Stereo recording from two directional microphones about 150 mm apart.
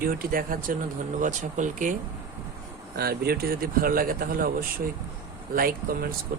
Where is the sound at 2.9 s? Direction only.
90° right; by 4.5 s 75° right (ahead or behind).